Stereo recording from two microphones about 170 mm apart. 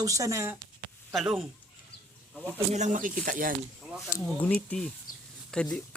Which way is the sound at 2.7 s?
45° right (ahead or behind).